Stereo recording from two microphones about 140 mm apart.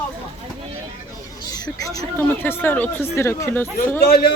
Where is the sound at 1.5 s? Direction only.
25° left (ahead or behind).